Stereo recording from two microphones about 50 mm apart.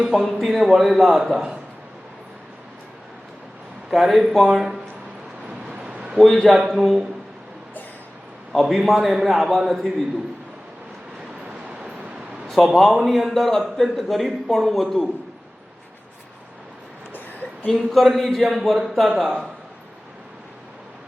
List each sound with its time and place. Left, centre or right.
0.0 s a man's voice: centre
3.8 s a man's voice: centre
5.5 s vehicle: centre
6.1 s a man's voice: centre
8.7 s a man's voice: centre
11.4 s vehicle: centre
12.5 s a man's voice: centre
17.7 s a man's voice: centre